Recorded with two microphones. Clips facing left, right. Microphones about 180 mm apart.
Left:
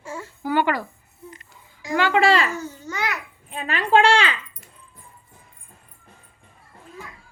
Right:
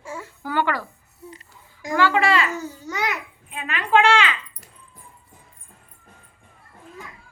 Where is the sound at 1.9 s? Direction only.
20° left (ahead or behind).